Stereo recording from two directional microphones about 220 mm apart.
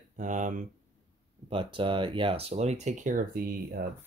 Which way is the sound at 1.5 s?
25° right (ahead or behind).